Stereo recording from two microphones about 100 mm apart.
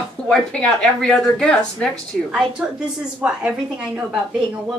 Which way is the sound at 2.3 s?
10° right (ahead or behind).